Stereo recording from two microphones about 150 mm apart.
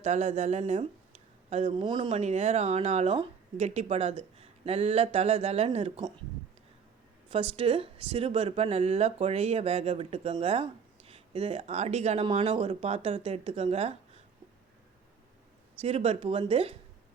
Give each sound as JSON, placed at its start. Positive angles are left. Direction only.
{"t": 0.0, "sound": "speech", "side_deg": -50}
{"t": 1.7, "sound": "speech", "side_deg": -30}
{"t": 2.1, "sound": "speech", "side_deg": -50}
{"t": 7.3, "sound": "speech", "side_deg": -35}
{"t": 15.8, "sound": "speech", "side_deg": -40}